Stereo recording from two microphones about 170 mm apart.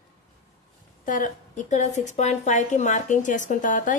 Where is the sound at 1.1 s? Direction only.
50° left (ahead or behind).